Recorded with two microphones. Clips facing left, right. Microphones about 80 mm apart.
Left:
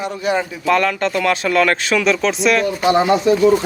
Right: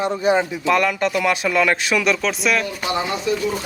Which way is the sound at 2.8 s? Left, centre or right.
Left.